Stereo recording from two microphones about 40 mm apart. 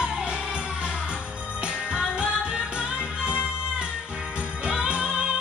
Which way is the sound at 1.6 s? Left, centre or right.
Right.